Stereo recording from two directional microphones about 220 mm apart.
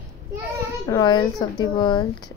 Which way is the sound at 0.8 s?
20° left (ahead or behind).